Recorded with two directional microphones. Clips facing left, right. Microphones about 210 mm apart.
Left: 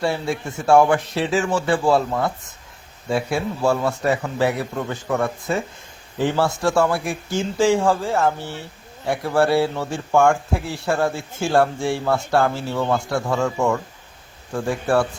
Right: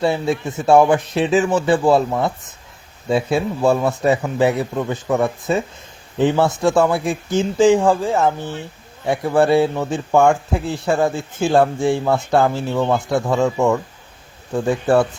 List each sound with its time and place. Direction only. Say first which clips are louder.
0.0 s speech: right 4 dB; 20° right (ahead or behind)